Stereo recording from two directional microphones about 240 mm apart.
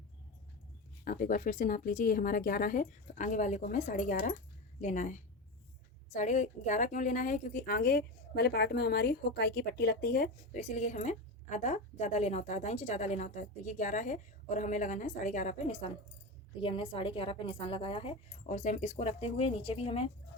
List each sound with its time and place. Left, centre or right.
1.0 s a woman's voice: left
6.1 s a woman's voice: left